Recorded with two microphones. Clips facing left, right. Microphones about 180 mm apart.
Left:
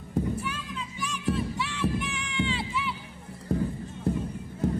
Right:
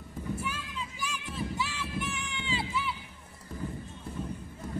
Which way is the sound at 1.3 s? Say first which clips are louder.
Left 5 dB; centre (ahead or behind).